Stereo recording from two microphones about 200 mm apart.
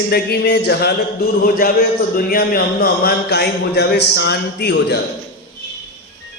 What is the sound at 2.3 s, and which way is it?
Speech, 50° left (ahead or behind).